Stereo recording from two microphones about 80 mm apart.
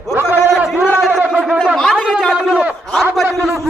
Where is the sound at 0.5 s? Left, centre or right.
Centre.